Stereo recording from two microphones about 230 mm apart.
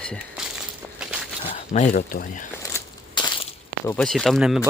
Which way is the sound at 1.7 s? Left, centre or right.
Left.